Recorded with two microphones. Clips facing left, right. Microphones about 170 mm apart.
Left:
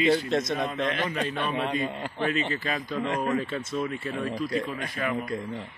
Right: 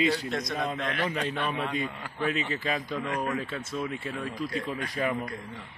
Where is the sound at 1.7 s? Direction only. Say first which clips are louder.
Left 3 dB; 55° left (ahead or behind).